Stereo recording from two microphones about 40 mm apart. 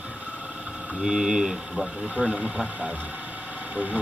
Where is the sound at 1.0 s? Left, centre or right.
Centre.